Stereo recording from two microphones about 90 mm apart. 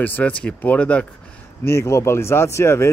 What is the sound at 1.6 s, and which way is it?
Speech, 30° left (ahead or behind).